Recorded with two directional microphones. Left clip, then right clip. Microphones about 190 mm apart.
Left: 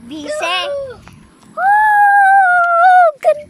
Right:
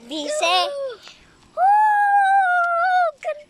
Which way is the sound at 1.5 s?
15° right (ahead or behind).